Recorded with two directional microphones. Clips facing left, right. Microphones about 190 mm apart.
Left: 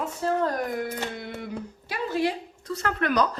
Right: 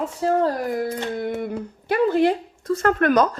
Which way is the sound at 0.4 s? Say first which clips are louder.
Right 4 dB; 35° right (ahead or behind).